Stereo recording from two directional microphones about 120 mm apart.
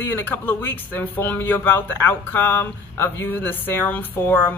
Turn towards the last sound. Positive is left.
turn(degrees=15)  # may be behind; listen again after turning